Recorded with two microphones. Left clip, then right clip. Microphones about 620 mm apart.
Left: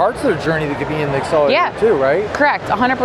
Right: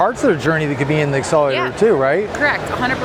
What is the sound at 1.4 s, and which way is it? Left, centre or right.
Speech, left.